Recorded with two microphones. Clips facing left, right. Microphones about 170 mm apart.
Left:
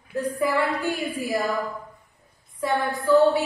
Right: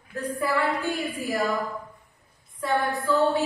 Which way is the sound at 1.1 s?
35° left (ahead or behind).